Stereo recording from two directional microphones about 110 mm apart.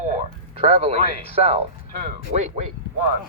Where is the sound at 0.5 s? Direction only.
60° right (ahead or behind).